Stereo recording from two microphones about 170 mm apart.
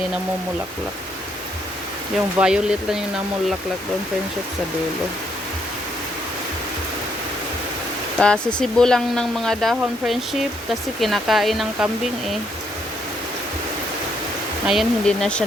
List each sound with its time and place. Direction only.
2.4 s speech: 5° right (ahead or behind)
8.2 s speech: 5° left (ahead or behind)
14.7 s speech: centre (ahead or behind)